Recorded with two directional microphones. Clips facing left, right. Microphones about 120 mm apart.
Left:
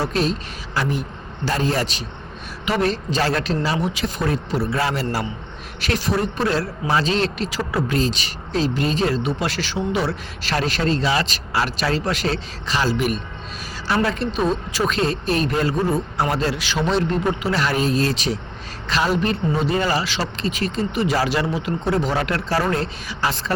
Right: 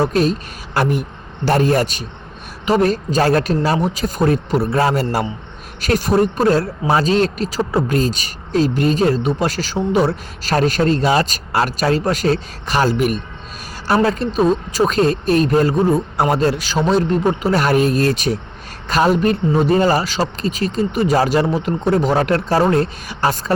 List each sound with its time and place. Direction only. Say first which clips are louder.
0.0 s speech: right 5 dB; 45° right (ahead or behind)
13.9 s speech: right 5 dB; 40° right (ahead or behind)